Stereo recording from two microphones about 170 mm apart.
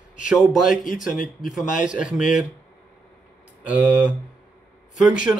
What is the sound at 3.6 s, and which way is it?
Speech, 5° right (ahead or behind).